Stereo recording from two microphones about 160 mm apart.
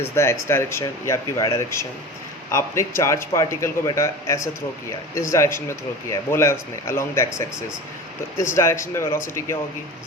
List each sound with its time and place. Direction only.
0.0 s speech: 15° left (ahead or behind)
8.4 s speech: 15° left (ahead or behind)